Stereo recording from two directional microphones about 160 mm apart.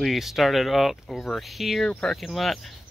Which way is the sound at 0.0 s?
Centre (ahead or behind).